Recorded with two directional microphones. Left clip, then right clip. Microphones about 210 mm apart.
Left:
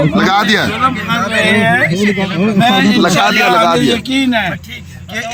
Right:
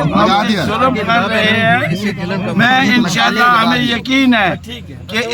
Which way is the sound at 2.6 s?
15° right (ahead or behind).